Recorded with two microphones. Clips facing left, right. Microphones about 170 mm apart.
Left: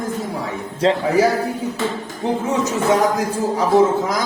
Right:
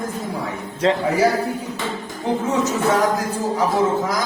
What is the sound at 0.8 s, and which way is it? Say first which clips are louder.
Speech: left 2 dB; 30° left (ahead or behind).